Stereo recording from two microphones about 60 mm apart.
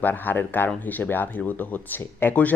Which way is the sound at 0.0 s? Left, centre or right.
Left.